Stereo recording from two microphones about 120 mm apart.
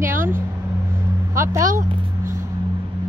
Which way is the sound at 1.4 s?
25° right (ahead or behind).